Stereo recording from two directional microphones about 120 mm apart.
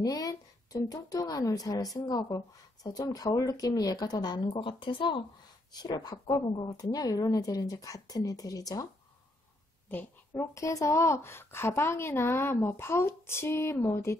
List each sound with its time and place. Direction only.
0.0 s a woman's voice: 30° left (ahead or behind)
10.3 s a woman's voice: 30° left (ahead or behind)